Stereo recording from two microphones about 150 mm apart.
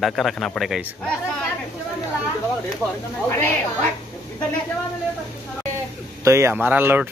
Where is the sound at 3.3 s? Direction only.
15° left (ahead or behind).